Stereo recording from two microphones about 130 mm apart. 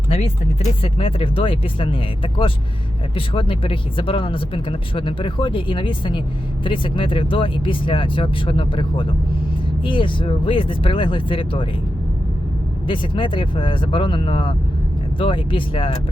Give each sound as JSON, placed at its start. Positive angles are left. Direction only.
{"t": 0.8, "sound": "speech", "side_deg": 45}
{"t": 12.9, "sound": "speech", "side_deg": 40}